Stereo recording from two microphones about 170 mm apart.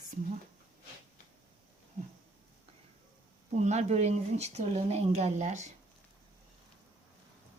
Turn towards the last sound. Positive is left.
turn(degrees=-45)  # may be behind; listen again after turning